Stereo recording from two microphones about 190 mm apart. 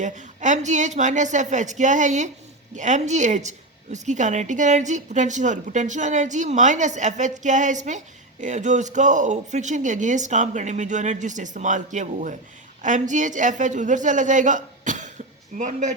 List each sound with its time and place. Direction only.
0.0 s speech: 40° right (ahead or behind)